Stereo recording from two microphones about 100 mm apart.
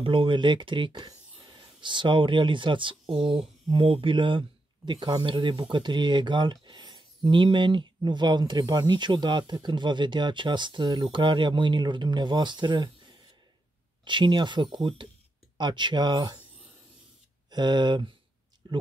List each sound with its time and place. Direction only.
0.0 s speech: 65° right (ahead or behind)
14.0 s speech: 50° right (ahead or behind)
17.5 s speech: 45° right (ahead or behind)